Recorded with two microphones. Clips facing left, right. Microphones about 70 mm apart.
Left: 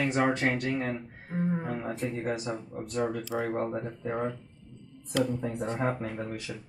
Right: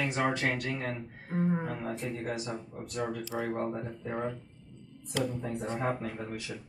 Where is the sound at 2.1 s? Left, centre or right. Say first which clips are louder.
Left 3 dB; left.